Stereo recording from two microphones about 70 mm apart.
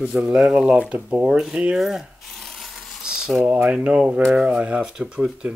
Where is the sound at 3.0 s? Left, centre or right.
Centre.